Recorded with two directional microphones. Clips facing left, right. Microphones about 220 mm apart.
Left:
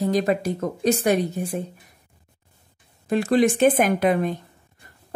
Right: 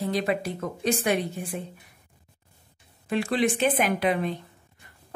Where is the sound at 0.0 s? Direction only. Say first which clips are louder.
Left 5 dB; 45° left (ahead or behind).